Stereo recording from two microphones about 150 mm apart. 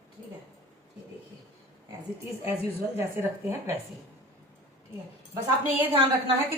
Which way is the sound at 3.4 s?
20° right (ahead or behind).